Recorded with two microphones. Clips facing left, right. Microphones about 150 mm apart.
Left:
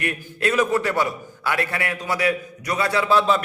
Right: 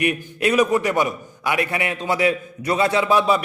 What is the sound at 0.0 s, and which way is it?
A man's voice, 15° right (ahead or behind).